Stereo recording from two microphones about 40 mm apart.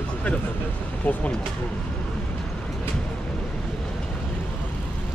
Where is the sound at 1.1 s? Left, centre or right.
Left.